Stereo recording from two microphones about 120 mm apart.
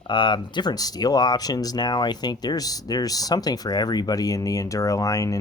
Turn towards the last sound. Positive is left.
turn(degrees=30)  # may be behind; listen again after turning